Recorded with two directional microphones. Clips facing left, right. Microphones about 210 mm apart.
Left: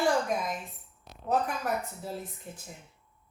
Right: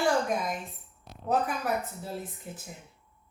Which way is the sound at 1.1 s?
Centre (ahead or behind).